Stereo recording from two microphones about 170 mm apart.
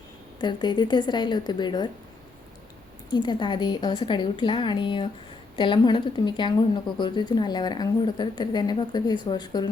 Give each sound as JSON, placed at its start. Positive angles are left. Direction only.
{"t": 0.3, "sound": "a woman's voice", "side_deg": 25}
{"t": 3.1, "sound": "a woman's voice", "side_deg": 25}